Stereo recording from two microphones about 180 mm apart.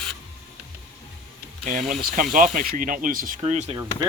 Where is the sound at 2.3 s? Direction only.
50° right (ahead or behind).